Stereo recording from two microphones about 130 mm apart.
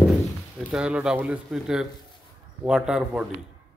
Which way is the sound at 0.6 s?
10° right (ahead or behind).